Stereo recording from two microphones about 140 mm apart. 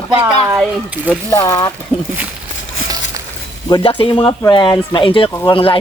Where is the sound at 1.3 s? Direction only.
20° left (ahead or behind).